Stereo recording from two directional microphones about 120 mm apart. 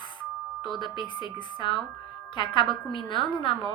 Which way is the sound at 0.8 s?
40° left (ahead or behind).